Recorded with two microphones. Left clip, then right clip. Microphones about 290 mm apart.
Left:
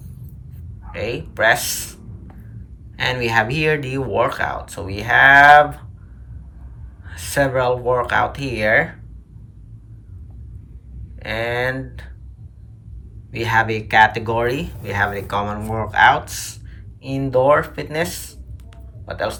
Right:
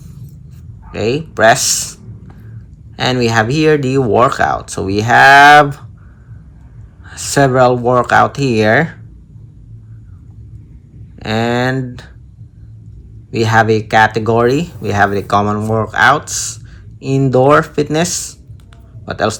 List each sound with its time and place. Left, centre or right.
0.9 s speech: centre
7.0 s speech: centre
11.2 s speech: centre
13.3 s speech: centre